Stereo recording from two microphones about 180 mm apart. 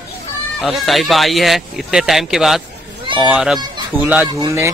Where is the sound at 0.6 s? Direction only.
Centre (ahead or behind); by 4.7 s 15° right (ahead or behind).